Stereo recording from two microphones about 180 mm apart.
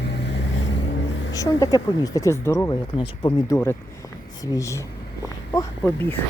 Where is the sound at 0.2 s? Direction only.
70° left (ahead or behind).